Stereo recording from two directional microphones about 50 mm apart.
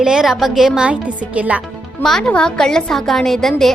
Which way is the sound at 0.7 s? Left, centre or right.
Right.